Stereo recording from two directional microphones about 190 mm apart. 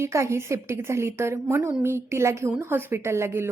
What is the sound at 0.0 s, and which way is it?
A woman's voice, 15° right (ahead or behind).